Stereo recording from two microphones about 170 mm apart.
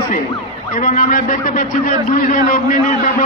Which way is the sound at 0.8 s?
55° left (ahead or behind).